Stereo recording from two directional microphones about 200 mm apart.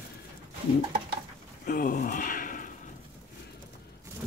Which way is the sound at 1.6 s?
40° left (ahead or behind).